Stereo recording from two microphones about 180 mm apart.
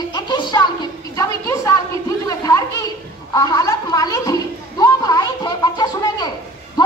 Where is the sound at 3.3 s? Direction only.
20° left (ahead or behind).